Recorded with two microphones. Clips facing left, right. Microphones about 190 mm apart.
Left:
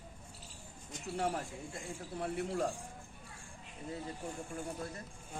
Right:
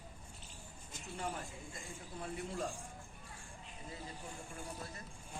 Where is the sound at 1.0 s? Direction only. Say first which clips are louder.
Left 7 dB; 75° left (ahead or behind).